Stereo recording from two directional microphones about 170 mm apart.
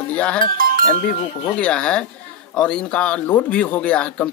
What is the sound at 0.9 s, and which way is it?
Speech, 30° left (ahead or behind).